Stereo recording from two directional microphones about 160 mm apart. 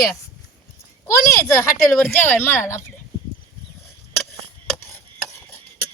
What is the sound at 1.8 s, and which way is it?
Speech, 5° left (ahead or behind).